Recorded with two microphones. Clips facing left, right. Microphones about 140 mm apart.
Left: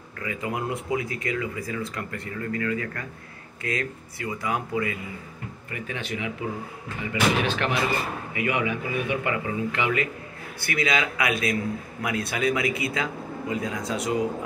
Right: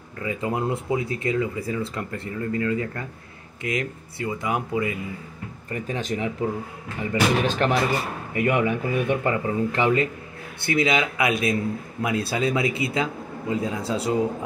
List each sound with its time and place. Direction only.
0.2 s speech: 25° right (ahead or behind)
5.7 s speech: 35° right (ahead or behind)
10.6 s speech: 25° right (ahead or behind)